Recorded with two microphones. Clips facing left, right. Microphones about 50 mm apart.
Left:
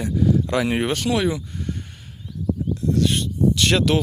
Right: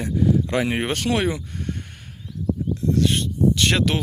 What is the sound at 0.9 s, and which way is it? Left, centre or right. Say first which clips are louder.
Speech: left 1 dB; right.